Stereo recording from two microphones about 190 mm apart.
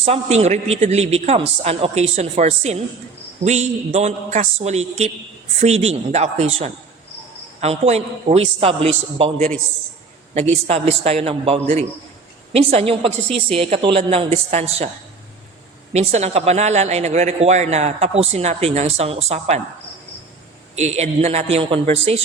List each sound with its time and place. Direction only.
0.0 s a man's voice: 35° right (ahead or behind)
10.3 s a man's voice: 35° right (ahead or behind)
15.9 s a man's voice: 35° right (ahead or behind)
20.7 s a man's voice: 35° right (ahead or behind)